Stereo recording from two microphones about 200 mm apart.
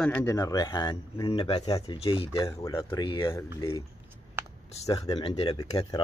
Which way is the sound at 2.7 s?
15° left (ahead or behind).